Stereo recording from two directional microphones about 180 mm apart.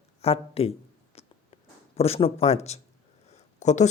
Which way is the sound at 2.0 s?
35° left (ahead or behind).